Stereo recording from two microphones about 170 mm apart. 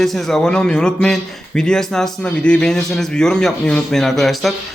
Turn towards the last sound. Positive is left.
turn(degrees=0)  # may be behind; listen again after turning